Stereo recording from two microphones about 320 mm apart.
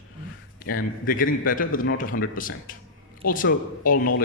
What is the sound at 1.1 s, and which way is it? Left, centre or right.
Speech, left.